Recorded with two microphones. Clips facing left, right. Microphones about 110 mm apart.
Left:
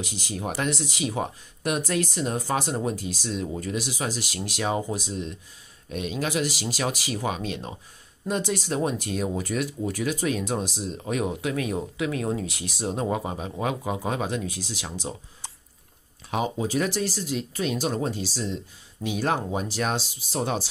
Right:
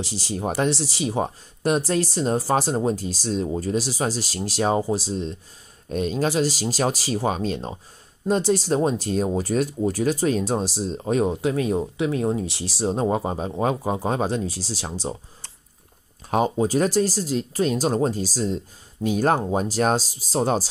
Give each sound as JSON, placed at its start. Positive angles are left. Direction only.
{"t": 0.0, "sound": "speech", "side_deg": -35}
{"t": 16.3, "sound": "speech", "side_deg": -45}